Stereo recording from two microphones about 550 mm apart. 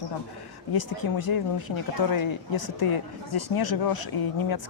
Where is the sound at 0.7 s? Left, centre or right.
Left.